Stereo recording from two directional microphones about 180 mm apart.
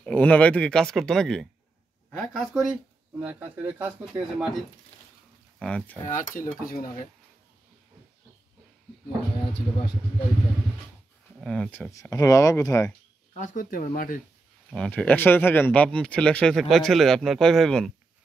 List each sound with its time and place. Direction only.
0.0 s a woman's voice: 10° left (ahead or behind)
3.2 s speech: 10° right (ahead or behind)
6.0 s speech: 45° left (ahead or behind)
11.4 s speech: 5° left (ahead or behind)
11.9 s speech: 15° left (ahead or behind)
13.3 s speech: 45° left (ahead or behind)
14.7 s speech: 5° left (ahead or behind)